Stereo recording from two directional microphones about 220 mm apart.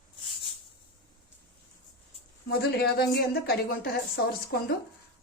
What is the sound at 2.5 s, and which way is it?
A woman's voice, 45° left (ahead or behind).